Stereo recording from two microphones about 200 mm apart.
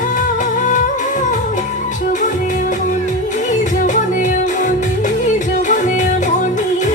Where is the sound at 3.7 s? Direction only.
40° left (ahead or behind).